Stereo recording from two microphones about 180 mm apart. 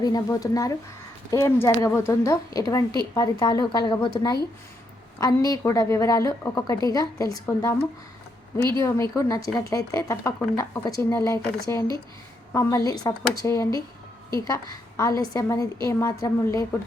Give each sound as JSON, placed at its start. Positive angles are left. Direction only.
{"t": 0.0, "sound": "a woman's voice", "side_deg": 20}
{"t": 5.2, "sound": "a woman's voice", "side_deg": 20}